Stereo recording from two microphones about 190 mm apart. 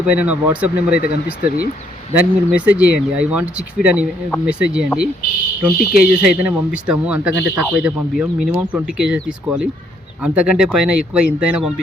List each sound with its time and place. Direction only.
0.3 s speech: 5° right (ahead or behind)
0.9 s speech: 55° left (ahead or behind)
2.1 s speech: 5° right (ahead or behind)